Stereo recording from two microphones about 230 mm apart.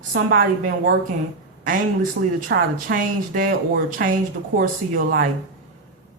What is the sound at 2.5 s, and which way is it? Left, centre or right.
Speech, right.